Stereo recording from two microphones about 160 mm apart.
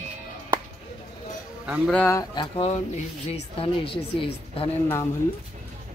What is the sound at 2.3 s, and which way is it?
Speech, 35° left (ahead or behind).